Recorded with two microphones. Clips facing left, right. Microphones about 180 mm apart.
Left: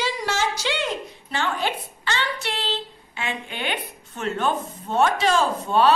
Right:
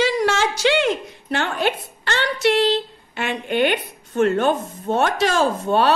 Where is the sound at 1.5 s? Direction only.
65° right (ahead or behind).